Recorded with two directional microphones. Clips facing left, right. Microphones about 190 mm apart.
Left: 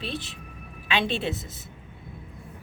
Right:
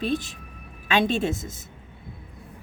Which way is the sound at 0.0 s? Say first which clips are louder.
Right 7 dB; 45° right (ahead or behind).